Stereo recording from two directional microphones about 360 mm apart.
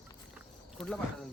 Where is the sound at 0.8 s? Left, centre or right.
Centre.